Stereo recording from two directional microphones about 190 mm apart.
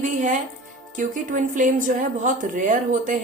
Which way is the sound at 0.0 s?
40° right (ahead or behind).